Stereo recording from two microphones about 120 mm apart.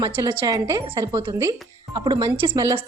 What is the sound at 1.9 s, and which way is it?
Speech, 35° right (ahead or behind).